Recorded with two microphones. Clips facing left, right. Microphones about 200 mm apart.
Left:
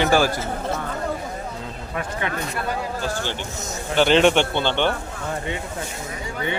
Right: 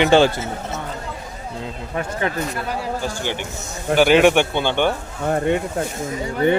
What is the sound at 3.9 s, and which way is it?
Speech, 10° right (ahead or behind).